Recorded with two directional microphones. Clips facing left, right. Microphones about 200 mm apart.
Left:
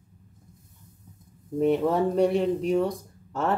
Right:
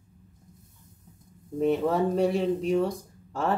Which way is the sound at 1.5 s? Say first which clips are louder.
Left 2 dB; centre (ahead or behind).